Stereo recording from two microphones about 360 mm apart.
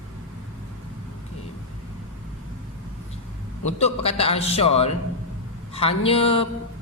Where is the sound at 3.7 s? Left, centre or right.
Centre.